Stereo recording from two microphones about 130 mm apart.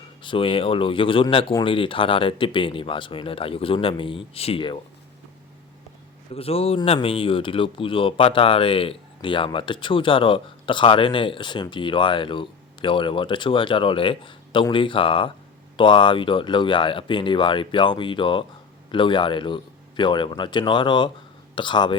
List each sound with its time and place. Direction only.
0.2 s speech: 40° left (ahead or behind)
6.3 s speech: 50° left (ahead or behind)